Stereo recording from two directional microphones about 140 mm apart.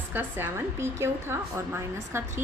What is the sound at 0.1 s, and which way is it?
A woman's voice, 15° right (ahead or behind).